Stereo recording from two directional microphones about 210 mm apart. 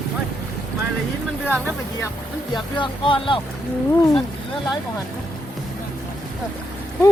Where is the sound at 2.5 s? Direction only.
25° left (ahead or behind).